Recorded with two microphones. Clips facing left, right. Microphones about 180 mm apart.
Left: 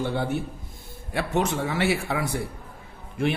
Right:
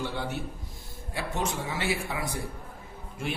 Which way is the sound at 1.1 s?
65° left (ahead or behind).